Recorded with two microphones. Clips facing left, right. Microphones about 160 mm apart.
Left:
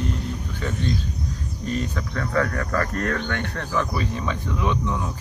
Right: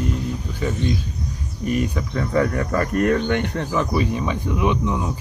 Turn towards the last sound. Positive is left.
turn(degrees=-15)  # may be behind; listen again after turning